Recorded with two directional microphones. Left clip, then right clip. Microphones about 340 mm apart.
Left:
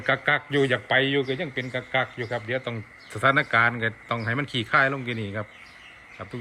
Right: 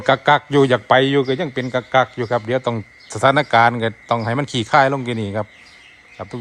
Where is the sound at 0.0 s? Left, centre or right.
Centre.